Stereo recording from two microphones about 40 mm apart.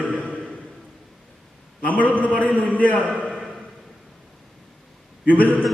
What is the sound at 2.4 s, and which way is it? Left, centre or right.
Speech, left.